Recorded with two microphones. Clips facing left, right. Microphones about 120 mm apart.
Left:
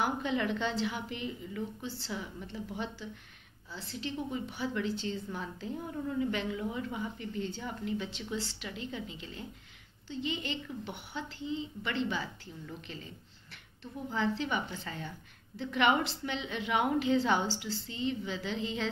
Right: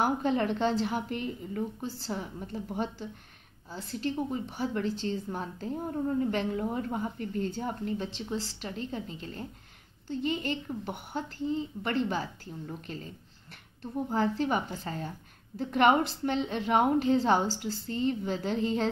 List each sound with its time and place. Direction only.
0.0 s a woman's voice: 40° right (ahead or behind)